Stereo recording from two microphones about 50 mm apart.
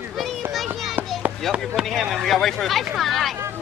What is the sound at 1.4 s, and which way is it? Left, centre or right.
Speech, centre.